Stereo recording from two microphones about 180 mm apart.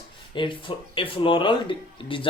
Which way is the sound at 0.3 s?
30° left (ahead or behind).